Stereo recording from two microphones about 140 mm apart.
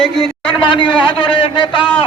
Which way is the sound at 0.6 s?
35° left (ahead or behind).